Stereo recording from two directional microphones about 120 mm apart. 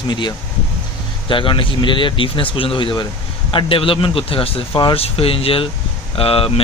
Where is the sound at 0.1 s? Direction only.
40° left (ahead or behind).